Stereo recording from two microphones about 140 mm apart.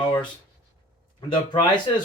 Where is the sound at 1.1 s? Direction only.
35° left (ahead or behind).